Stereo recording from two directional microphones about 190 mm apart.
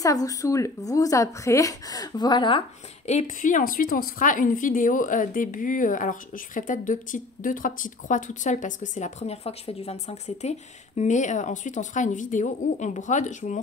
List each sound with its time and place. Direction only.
0.0 s a woman's voice: 20° left (ahead or behind)
3.1 s speech: 40° left (ahead or behind)